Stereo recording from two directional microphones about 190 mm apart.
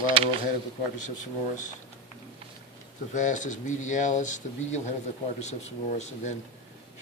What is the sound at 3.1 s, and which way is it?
Speech, 40° left (ahead or behind).